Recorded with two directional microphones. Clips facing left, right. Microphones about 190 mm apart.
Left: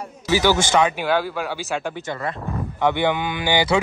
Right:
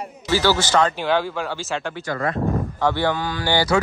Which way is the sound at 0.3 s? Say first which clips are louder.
Left 1 dB; 15° left (ahead or behind).